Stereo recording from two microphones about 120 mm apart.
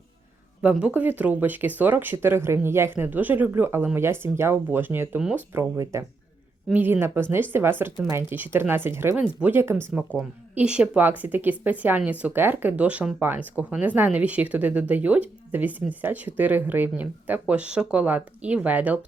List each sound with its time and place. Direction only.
0.6 s a woman's voice: 10° right (ahead or behind); by 6.1 s 25° right (ahead or behind)
6.7 s a woman's voice: 15° right (ahead or behind)